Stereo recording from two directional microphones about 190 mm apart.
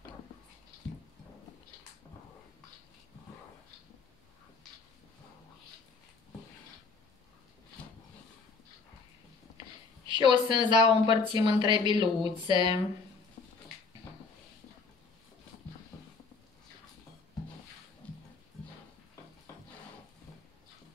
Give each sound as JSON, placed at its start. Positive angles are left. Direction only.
{"t": 10.0, "sound": "speech", "side_deg": -25}
{"t": 12.2, "sound": "speech", "side_deg": 25}
{"t": 18.0, "sound": "music", "side_deg": 5}